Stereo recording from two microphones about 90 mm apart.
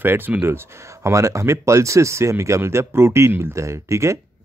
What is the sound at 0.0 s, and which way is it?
Speech, 20° right (ahead or behind).